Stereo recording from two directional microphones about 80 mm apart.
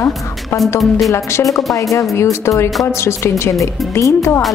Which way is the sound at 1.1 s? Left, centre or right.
Left.